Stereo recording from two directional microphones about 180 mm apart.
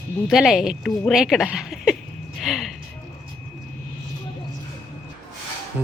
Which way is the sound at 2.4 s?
Centre (ahead or behind).